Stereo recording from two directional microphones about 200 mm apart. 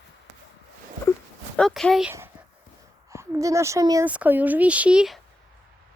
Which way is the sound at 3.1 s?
15° right (ahead or behind).